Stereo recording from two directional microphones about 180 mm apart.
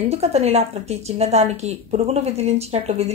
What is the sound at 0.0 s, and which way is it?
A woman's voice, 35° right (ahead or behind).